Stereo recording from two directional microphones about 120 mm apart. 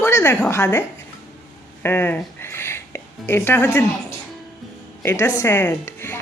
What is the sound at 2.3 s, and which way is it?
Music, 20° left (ahead or behind).